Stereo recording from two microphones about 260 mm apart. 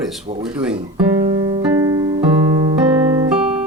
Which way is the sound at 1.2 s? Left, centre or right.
Right.